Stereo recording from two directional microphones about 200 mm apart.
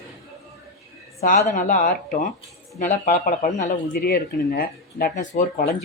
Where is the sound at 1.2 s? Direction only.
40° left (ahead or behind).